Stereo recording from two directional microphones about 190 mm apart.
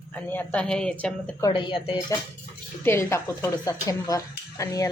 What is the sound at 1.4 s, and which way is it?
Speech, 25° left (ahead or behind).